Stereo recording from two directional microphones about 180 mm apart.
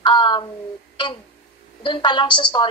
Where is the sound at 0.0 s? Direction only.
25° left (ahead or behind).